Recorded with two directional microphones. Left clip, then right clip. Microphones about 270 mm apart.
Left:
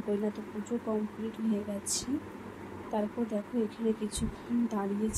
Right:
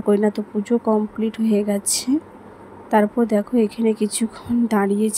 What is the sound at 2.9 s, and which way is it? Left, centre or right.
Speech, right.